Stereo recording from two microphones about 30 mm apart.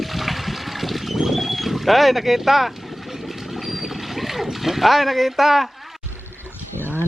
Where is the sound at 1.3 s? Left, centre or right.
Centre.